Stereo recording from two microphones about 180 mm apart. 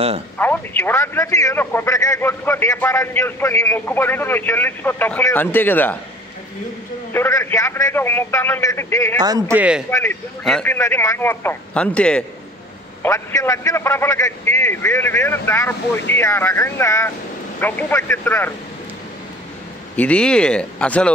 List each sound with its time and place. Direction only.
0.4 s speech: 10° left (ahead or behind)
7.1 s speech: 15° left (ahead or behind)
9.2 s a man's voice: 20° right (ahead or behind)
9.6 s speech: 5° right (ahead or behind)
9.8 s speech: 10° left (ahead or behind)
13.0 s speech: 15° left (ahead or behind)
20.0 s speech: 5° left (ahead or behind)